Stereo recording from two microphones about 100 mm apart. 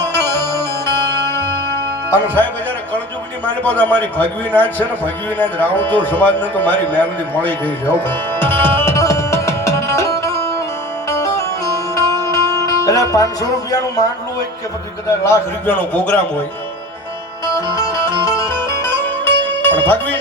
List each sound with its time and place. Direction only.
0.0 s music: 25° left (ahead or behind)
3.4 s a man's voice: 15° left (ahead or behind)
8.0 s music: 20° left (ahead or behind); by 14.1 s 40° left (ahead or behind)
15.6 s a man's voice: 20° left (ahead or behind)
17.7 s music: 30° left (ahead or behind)